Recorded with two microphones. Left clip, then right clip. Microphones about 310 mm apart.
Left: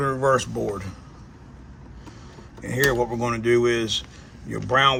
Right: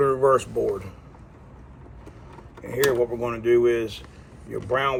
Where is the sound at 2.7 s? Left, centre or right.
Left.